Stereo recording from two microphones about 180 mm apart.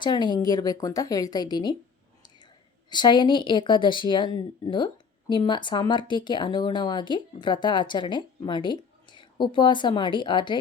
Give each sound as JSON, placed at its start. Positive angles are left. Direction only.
{"t": 0.0, "sound": "speech", "side_deg": 25}
{"t": 2.9, "sound": "speech", "side_deg": 25}